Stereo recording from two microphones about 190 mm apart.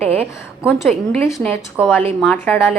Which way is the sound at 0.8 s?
Centre (ahead or behind).